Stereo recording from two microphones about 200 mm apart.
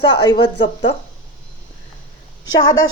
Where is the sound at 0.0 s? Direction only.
25° left (ahead or behind).